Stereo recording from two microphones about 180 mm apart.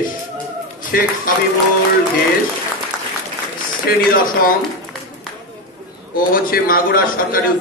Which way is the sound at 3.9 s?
55° left (ahead or behind).